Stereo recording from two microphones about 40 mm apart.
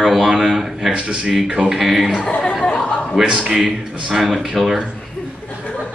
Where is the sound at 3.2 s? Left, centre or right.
Right.